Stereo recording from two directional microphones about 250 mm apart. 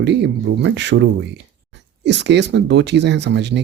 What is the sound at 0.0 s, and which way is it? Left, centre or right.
Speech, right.